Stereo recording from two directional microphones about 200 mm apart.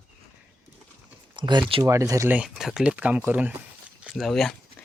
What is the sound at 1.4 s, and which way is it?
Speech, 25° right (ahead or behind).